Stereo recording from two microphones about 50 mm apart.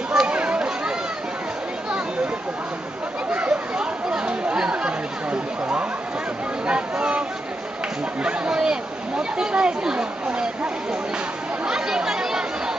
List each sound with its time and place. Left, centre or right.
0.1 s chatter: centre
3.3 s chatter: right
6.6 s a sound: right
11.6 s chatter: centre